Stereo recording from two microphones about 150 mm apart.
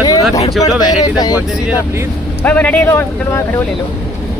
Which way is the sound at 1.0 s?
25° left (ahead or behind).